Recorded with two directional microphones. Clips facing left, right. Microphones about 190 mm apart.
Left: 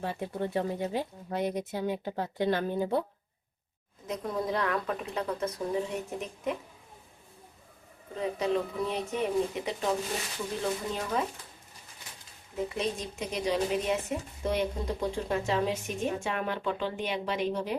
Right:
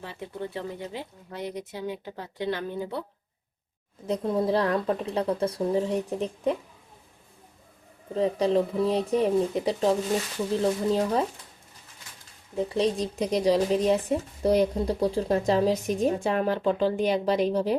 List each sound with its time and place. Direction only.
0.0 s speech: 50° left (ahead or behind)
4.0 s speech: 30° right (ahead or behind)
8.1 s speech: 35° right (ahead or behind)
12.5 s speech: 35° right (ahead or behind)